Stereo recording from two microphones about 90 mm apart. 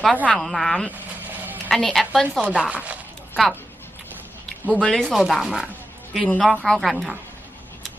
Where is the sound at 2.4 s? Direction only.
10° right (ahead or behind).